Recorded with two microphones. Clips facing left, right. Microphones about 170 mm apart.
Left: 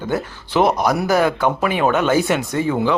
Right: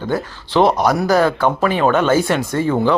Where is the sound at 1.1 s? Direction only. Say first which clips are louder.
Right 2 dB; 20° left (ahead or behind).